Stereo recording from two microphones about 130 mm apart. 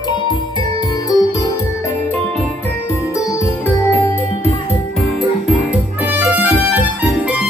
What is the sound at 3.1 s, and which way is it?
Music, 20° left (ahead or behind).